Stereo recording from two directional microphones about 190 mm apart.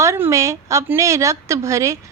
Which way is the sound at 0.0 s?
15° right (ahead or behind).